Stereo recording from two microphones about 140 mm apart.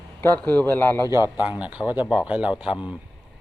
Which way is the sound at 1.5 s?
10° right (ahead or behind).